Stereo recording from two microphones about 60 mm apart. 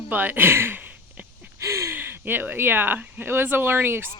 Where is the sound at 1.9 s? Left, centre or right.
Right.